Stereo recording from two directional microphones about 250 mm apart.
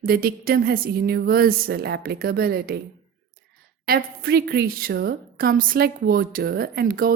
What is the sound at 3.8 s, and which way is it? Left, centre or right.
A woman's voice, right.